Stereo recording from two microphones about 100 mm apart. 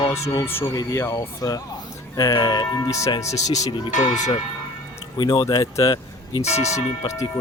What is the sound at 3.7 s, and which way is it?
Speech, 50° left (ahead or behind).